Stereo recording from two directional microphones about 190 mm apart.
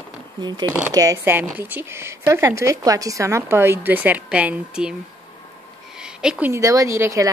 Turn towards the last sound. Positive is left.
turn(degrees=-15)  # may be behind; listen again after turning